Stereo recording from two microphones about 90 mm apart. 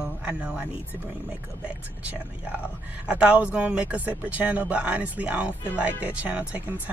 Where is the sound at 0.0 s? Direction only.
15° right (ahead or behind).